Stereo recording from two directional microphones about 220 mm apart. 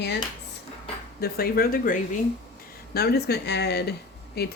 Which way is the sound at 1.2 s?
45° left (ahead or behind).